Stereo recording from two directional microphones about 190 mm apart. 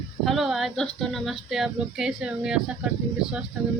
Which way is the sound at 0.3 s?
Centre (ahead or behind).